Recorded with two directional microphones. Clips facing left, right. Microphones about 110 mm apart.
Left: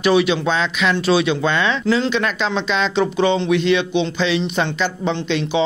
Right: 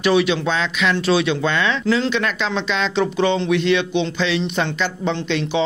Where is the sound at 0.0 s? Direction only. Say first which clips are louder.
Left 1 dB; 20° left (ahead or behind).